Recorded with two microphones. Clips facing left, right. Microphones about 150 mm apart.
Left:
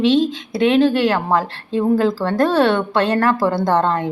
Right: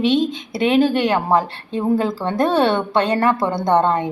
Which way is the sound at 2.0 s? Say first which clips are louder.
Left 3 dB; centre (ahead or behind).